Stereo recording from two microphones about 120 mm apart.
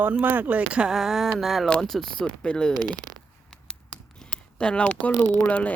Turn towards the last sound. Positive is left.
turn(degrees=10)  # may be behind; listen again after turning